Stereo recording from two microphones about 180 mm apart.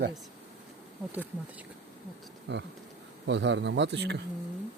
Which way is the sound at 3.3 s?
85° right.